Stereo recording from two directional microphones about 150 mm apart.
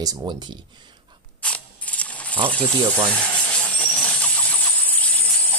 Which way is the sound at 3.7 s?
10° left (ahead or behind).